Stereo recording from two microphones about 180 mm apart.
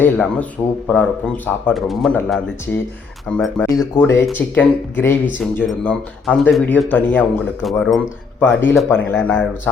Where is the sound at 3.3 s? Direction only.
5° left (ahead or behind).